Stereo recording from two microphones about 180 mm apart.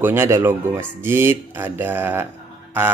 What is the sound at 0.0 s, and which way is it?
A man's voice, 15° right (ahead or behind).